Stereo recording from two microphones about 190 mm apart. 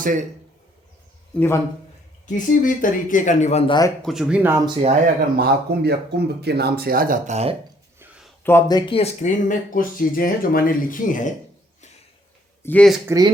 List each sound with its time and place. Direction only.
0.0 s speech: 45° right (ahead or behind)
1.4 s a man's voice: 15° left (ahead or behind)
2.2 s speech: 45° left (ahead or behind)
3.7 s speech: 20° left (ahead or behind)
4.0 s speech: centre (ahead or behind)
5.4 s speech: 55° right (ahead or behind); by 7.5 s 35° right (ahead or behind)
8.4 s speech: 15° left (ahead or behind); by 11.3 s 45° left (ahead or behind)
12.6 s speech: 5° left (ahead or behind)
13.1 s speech: 20° right (ahead or behind)